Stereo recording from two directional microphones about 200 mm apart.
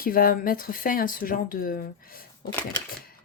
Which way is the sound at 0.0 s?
45° left (ahead or behind).